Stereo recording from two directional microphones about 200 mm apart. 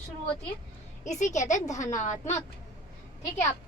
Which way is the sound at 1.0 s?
35° left (ahead or behind).